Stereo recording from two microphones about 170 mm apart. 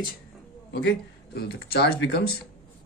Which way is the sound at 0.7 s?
70° left (ahead or behind).